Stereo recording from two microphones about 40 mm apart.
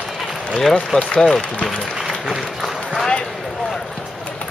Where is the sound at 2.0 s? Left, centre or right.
Centre.